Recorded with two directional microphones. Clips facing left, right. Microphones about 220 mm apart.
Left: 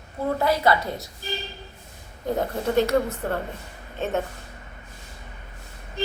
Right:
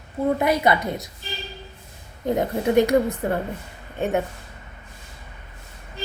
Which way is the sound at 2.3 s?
15° right (ahead or behind).